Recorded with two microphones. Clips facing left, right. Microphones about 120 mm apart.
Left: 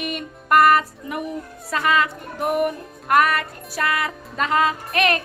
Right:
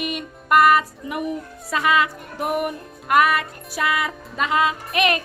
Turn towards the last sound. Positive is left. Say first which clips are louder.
# even
turn(degrees=-15)  # may be behind; listen again after turning